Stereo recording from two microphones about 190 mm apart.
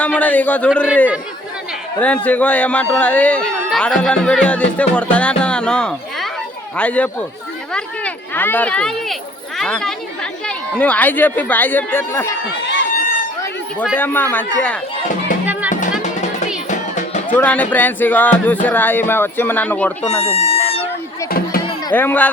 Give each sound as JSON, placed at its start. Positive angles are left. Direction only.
{"t": 0.0, "sound": "speech", "side_deg": 5}
{"t": 2.0, "sound": "speech", "side_deg": 5}
{"t": 12.5, "sound": "a sound", "side_deg": 70}
{"t": 13.9, "sound": "speech", "side_deg": 10}
{"t": 17.3, "sound": "speech", "side_deg": 10}
{"t": 20.2, "sound": "a sound", "side_deg": 35}
{"t": 21.2, "sound": "music", "side_deg": 50}
{"t": 21.9, "sound": "speech", "side_deg": 10}